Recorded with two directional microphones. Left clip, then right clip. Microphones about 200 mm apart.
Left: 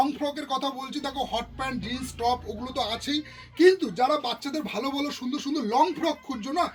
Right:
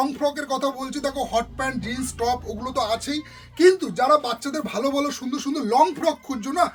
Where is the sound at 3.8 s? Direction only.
50° right (ahead or behind).